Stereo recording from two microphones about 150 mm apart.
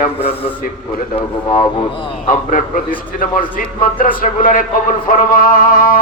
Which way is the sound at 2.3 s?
65° left (ahead or behind).